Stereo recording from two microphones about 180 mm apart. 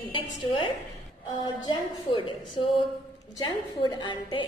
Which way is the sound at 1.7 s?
25° left (ahead or behind).